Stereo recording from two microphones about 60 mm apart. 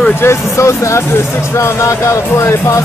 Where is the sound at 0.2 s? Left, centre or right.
Left.